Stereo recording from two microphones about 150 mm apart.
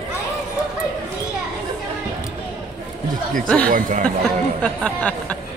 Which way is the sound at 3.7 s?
65° right (ahead or behind).